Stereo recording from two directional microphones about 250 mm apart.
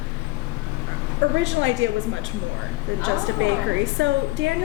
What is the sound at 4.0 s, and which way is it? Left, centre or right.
Speech, right.